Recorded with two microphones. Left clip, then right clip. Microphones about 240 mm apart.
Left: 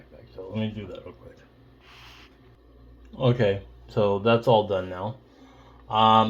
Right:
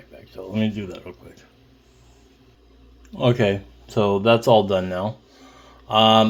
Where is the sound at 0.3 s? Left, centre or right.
Right.